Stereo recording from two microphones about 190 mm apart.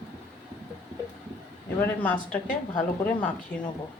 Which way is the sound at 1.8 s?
10° left (ahead or behind).